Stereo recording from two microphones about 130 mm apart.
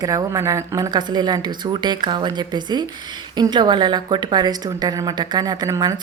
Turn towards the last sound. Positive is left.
turn(degrees=-30)  # may be behind; listen again after turning